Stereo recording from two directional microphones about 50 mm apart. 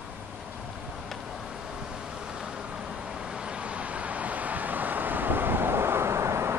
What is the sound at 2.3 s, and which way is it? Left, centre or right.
Vehicle, centre.